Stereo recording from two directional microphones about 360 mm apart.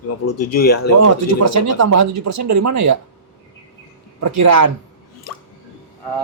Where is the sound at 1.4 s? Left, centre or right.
Right.